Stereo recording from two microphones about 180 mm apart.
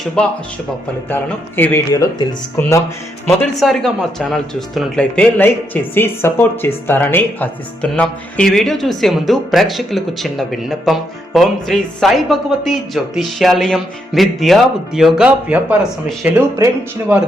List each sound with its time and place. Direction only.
0.2 s speech: 5° left (ahead or behind)
3.2 s speech: 5° left (ahead or behind)
16.6 s speech: 20° right (ahead or behind)
17.1 s speech: 10° right (ahead or behind)